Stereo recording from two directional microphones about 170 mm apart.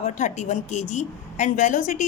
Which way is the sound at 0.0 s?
45° left (ahead or behind).